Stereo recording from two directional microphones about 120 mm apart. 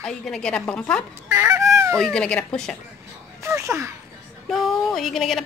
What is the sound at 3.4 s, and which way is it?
Speech, 25° right (ahead or behind).